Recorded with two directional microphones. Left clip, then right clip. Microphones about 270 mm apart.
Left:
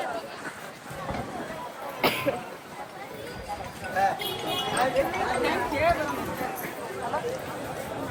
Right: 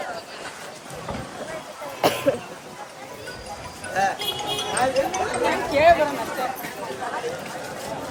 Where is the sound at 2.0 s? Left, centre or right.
Centre.